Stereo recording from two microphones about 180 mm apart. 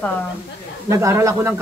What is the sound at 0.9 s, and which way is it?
Speech, 15° right (ahead or behind).